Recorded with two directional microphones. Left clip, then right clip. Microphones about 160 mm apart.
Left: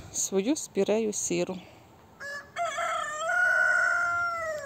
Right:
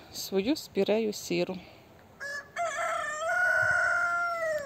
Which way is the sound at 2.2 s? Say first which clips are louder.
Left 1 dB; 90° left.